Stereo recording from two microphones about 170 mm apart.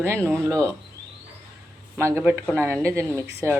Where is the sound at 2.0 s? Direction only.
15° right (ahead or behind).